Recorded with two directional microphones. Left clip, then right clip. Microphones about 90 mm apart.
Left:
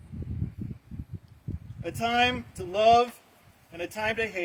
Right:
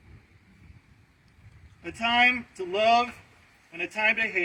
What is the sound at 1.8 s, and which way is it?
Speech, 40° left (ahead or behind).